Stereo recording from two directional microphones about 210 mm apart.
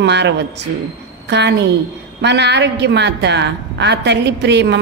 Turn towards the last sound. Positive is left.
turn(degrees=-55)  # may be behind; listen again after turning